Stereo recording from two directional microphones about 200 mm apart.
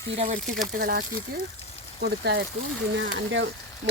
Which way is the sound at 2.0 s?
55° right (ahead or behind).